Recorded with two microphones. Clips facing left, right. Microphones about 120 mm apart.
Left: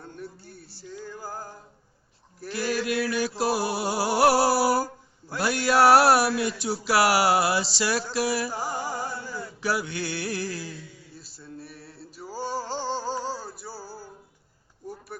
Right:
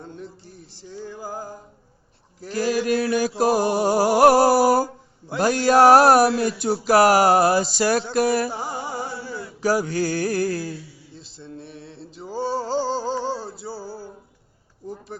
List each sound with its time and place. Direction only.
0.0 s music: 20° right (ahead or behind)
1.2 s music: 15° right (ahead or behind)
2.5 s speech: 40° right (ahead or behind)
3.1 s a sound: 45° right (ahead or behind)
8.4 s music: 25° right (ahead or behind)
8.9 s a sound: 10° right (ahead or behind)
9.2 s a sound: 40° right (ahead or behind)
11.1 s male singing: 25° right (ahead or behind)
13.2 s music: 25° right (ahead or behind)